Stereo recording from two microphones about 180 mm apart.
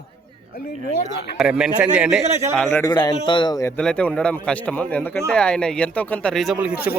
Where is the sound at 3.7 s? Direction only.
5° left (ahead or behind).